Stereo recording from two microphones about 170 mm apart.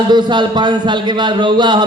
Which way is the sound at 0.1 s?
25° right (ahead or behind).